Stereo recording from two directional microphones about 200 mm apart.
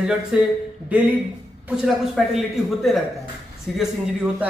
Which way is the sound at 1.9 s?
Centre (ahead or behind).